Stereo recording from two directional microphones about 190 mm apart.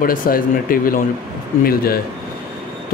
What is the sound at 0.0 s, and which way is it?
Speech, 45° left (ahead or behind).